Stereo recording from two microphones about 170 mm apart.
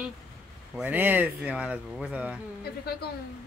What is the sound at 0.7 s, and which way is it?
Speech, 10° right (ahead or behind).